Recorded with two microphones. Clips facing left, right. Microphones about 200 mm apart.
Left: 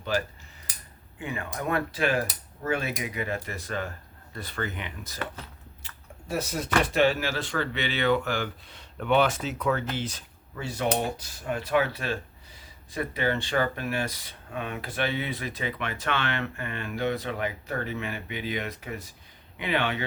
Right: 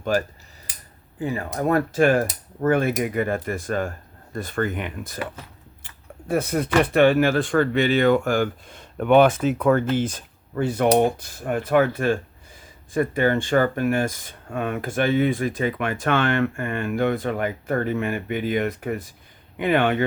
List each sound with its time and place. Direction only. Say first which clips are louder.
0.0 s speech: right 6 dB; 45° right (ahead or behind)
1.2 s speech: right 8 dB; 35° right (ahead or behind)